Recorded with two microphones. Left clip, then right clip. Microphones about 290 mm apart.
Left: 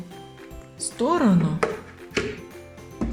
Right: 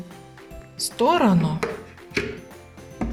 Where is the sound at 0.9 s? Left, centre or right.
Right.